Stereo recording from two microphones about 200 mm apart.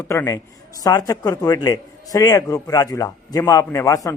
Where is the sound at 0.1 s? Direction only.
15° left (ahead or behind).